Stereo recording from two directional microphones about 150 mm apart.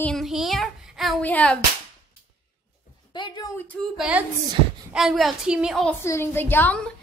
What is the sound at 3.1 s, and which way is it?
Speech, 30° left (ahead or behind).